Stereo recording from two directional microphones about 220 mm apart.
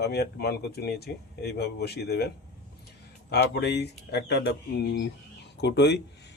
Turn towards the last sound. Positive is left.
turn(degrees=50)  # may be behind; listen again after turning